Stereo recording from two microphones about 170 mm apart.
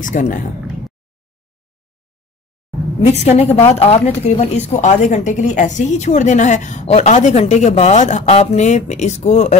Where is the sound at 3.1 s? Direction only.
40° left (ahead or behind).